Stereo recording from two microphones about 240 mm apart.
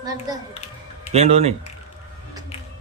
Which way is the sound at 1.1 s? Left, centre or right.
Right.